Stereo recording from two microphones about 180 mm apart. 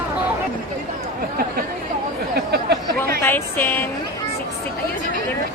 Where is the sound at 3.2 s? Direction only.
10° left (ahead or behind).